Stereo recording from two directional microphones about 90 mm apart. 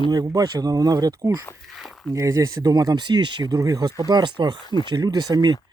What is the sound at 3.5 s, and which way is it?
Speech, 40° right (ahead or behind).